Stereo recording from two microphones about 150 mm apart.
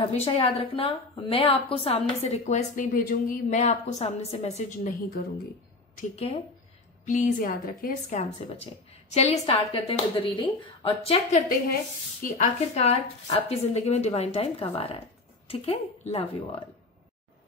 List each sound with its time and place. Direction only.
0.1 s a woman's voice: 45° left (ahead or behind); by 5.2 s 60° left (ahead or behind)
6.1 s speech: 40° left (ahead or behind)
7.1 s a woman's voice: 60° left (ahead or behind)
8.1 s a woman's voice: 50° left (ahead or behind)
12.2 s a woman's voice: 50° left (ahead or behind)